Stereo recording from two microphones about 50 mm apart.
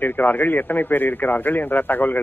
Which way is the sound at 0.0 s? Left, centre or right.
Left.